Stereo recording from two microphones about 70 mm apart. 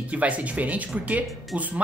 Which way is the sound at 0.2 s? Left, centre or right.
Right.